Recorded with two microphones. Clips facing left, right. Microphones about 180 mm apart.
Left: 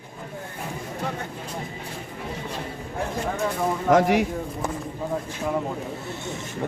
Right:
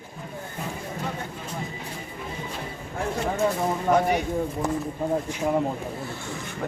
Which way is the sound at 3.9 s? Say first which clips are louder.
Left 4 dB; 90° left.